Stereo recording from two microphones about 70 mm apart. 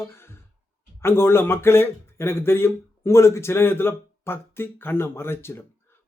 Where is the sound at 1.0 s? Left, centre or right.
Left.